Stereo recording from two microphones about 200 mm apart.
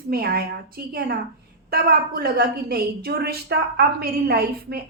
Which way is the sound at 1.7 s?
50° right (ahead or behind).